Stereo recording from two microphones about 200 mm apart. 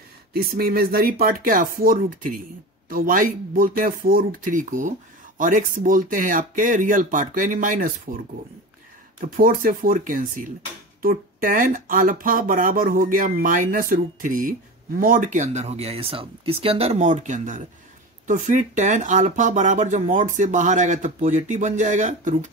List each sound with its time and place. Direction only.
0.3 s speech: 50° right (ahead or behind)
9.2 s speech: 40° right (ahead or behind)